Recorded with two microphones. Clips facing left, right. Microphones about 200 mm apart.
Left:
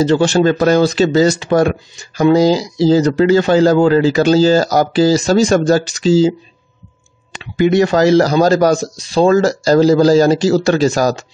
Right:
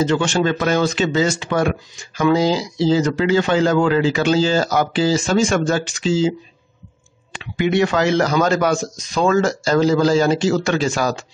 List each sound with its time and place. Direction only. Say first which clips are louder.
0.0 s speech: left 6 dB; 35° left (ahead or behind)
7.3 s speech: left 5 dB; 40° left (ahead or behind)